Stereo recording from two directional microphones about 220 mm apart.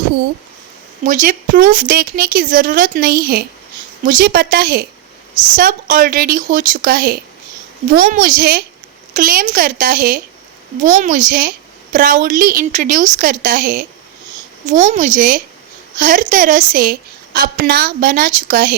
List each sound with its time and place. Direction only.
1.0 s a woman's voice: 35° right (ahead or behind)